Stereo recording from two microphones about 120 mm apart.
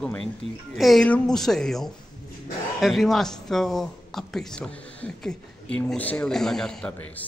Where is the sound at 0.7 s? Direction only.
Centre (ahead or behind).